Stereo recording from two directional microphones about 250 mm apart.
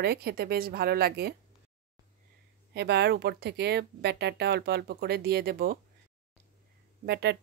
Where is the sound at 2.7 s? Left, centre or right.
Right.